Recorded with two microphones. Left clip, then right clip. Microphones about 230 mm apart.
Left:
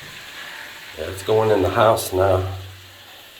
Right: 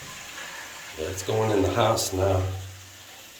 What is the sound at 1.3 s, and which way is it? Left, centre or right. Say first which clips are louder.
Speech: left 7 dB; centre.